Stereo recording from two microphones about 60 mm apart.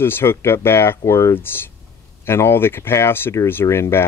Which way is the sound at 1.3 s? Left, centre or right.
Left.